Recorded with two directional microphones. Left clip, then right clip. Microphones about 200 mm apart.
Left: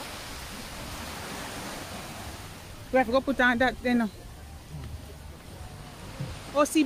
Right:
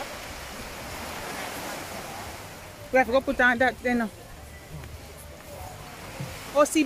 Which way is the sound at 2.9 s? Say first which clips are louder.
Right 2 dB; 15° left (ahead or behind).